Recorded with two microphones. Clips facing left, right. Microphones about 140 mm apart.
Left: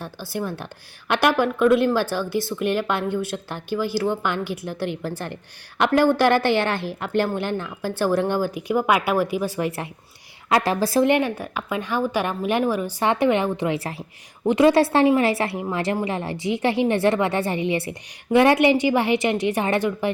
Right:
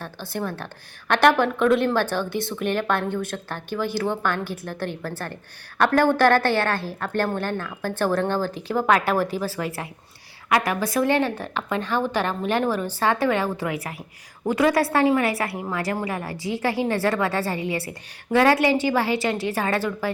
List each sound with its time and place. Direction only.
0.0 s a woman's voice: 10° left (ahead or behind); by 11.0 s 30° left (ahead or behind)
11.0 s a woman's voice: 15° left (ahead or behind)